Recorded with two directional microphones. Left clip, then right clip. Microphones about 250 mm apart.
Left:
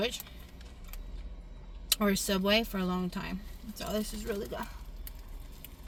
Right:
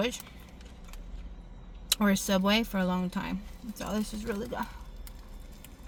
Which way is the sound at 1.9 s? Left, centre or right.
Centre.